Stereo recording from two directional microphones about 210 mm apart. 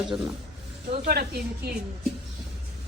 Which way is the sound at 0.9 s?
45° right (ahead or behind).